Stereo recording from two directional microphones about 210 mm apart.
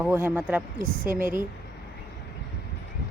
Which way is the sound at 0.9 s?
40° right (ahead or behind).